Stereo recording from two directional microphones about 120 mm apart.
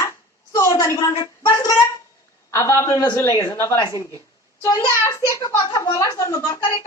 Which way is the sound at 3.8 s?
40° left (ahead or behind).